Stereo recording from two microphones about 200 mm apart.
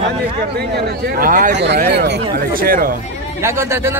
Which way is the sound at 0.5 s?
50° right (ahead or behind).